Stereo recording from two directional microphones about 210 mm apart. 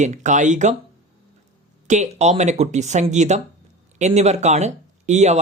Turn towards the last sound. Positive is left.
turn(degrees=-35)  # may be behind; listen again after turning